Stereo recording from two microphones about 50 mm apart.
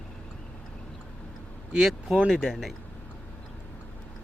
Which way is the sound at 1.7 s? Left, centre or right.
Centre.